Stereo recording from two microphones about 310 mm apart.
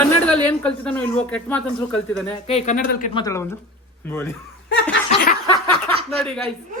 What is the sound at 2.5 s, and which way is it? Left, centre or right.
Speech, left.